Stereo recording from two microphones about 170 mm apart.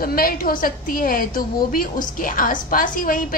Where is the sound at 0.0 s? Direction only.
60° left (ahead or behind).